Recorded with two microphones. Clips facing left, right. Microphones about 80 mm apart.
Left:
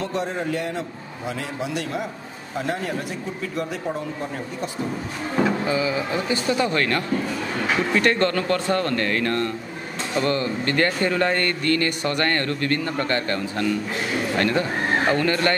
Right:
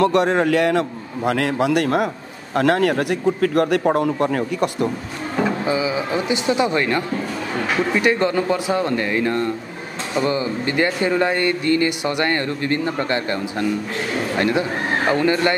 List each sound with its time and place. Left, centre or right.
0.0 s a man's voice: right
2.5 s a man's voice: right
5.7 s speech: centre